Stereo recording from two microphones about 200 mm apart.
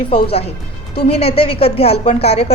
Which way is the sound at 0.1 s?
30° left (ahead or behind).